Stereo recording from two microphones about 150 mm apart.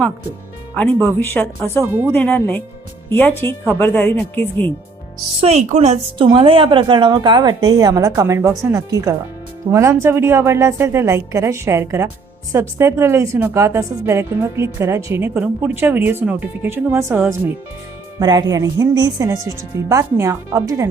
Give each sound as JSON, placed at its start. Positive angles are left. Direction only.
{"t": 1.2, "sound": "speech", "side_deg": 15}
{"t": 5.4, "sound": "a woman's voice", "side_deg": -45}